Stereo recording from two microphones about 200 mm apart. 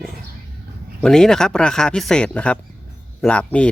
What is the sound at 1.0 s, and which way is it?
Speech, 5° left (ahead or behind).